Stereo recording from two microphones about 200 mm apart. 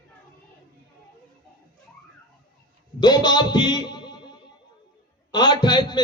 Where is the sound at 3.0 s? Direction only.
20° left (ahead or behind).